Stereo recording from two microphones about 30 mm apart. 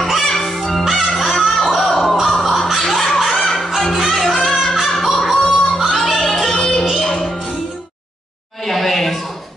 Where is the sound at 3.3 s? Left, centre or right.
Left.